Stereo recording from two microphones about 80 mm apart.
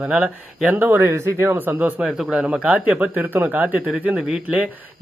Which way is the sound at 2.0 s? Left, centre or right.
Centre.